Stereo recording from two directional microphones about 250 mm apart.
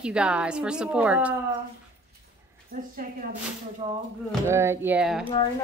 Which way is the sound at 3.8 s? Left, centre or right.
Right.